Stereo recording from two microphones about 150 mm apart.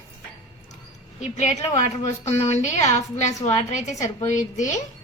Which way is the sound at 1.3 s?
50° left (ahead or behind).